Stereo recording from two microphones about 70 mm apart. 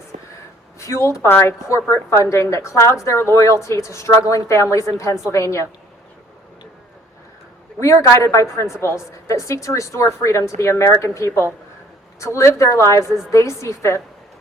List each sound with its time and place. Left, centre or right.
0.8 s a woman's voice: left
7.8 s a woman's voice: left